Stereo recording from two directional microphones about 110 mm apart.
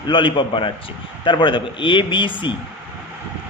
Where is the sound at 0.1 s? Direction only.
45° left (ahead or behind).